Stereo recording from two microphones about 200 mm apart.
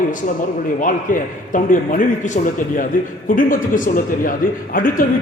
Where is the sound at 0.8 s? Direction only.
40° left (ahead or behind).